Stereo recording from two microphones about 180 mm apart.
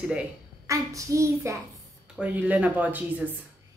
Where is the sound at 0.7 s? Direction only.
15° right (ahead or behind).